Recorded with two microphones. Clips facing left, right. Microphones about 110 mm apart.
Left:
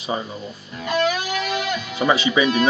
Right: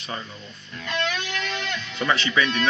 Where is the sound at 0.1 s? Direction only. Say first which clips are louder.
Left 8 dB; 25° left (ahead or behind).